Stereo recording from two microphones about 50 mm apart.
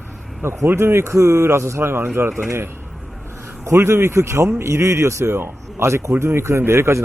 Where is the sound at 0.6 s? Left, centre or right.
Right.